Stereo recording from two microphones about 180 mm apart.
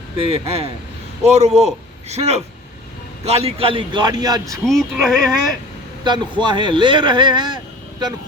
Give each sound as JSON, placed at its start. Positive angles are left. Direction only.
{"t": 0.2, "sound": "a man's voice", "side_deg": -35}
{"t": 4.6, "sound": "speech", "side_deg": 0}
{"t": 6.1, "sound": "speech", "side_deg": -25}